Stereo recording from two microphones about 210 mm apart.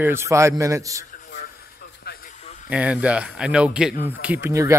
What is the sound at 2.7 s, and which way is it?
A man's voice, 5° right (ahead or behind).